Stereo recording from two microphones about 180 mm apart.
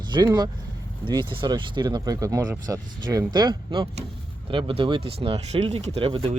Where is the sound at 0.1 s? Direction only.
20° right (ahead or behind).